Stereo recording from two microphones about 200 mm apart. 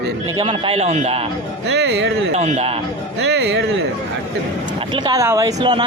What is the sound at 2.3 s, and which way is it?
Speech, 35° right (ahead or behind).